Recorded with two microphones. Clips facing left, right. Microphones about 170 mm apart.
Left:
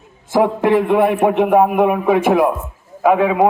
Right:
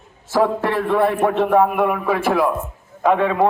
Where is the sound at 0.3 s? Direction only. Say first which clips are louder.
Left 4 dB; 15° left (ahead or behind).